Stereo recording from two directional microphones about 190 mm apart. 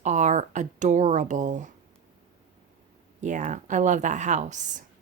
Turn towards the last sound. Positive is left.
turn(degrees=-40)  # may be behind; listen again after turning